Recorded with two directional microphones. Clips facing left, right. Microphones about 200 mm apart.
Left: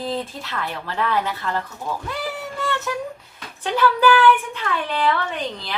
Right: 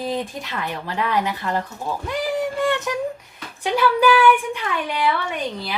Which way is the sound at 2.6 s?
15° right (ahead or behind).